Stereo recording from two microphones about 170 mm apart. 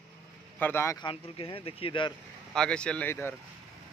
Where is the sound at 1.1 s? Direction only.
30° left (ahead or behind).